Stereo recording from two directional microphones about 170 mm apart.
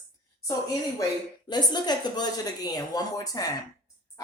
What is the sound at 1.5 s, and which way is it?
A woman's voice, 25° left (ahead or behind).